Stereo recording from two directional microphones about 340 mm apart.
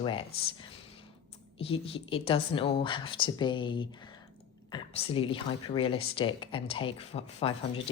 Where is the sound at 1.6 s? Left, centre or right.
Centre.